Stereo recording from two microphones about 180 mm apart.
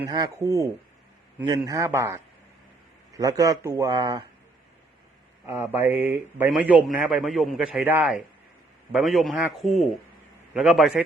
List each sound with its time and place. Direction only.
0.1 s a man's voice: 20° right (ahead or behind)
5.5 s a man's voice: 10° right (ahead or behind)